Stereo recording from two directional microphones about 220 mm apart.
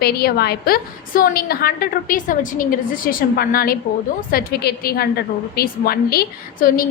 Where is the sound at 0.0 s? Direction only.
45° left (ahead or behind).